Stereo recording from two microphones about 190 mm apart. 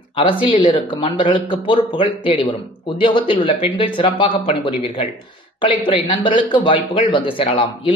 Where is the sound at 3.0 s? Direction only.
25° left (ahead or behind).